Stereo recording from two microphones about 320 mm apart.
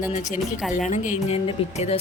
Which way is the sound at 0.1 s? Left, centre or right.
Left.